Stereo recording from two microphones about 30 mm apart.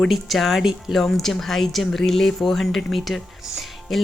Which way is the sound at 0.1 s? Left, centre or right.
Centre.